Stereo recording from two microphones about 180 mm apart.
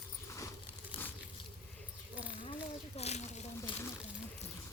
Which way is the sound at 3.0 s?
40° left (ahead or behind).